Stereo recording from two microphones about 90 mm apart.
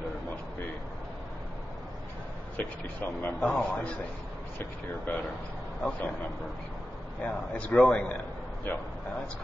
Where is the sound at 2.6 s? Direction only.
20° left (ahead or behind).